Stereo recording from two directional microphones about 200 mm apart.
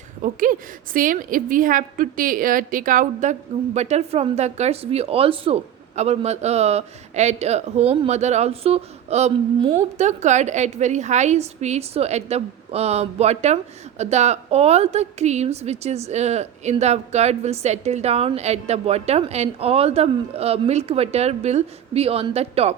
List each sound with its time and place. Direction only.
0.2 s a woman's voice: 40° right (ahead or behind)